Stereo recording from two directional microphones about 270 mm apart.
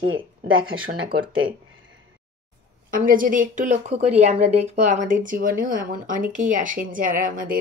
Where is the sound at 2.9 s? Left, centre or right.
Right.